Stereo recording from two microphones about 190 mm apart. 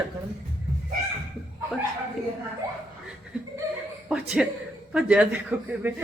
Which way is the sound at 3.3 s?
5° right (ahead or behind).